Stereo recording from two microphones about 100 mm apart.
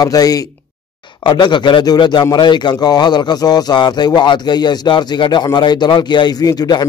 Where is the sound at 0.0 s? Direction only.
40° left (ahead or behind).